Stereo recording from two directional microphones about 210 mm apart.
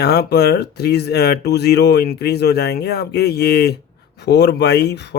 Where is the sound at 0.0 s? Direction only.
50° left (ahead or behind).